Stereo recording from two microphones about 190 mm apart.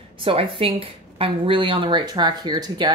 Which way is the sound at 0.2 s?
30° right (ahead or behind).